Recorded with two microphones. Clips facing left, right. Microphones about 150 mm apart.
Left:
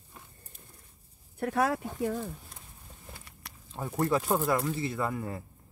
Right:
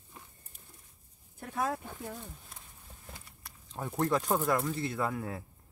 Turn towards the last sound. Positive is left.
turn(degrees=0)  # may be behind; listen again after turning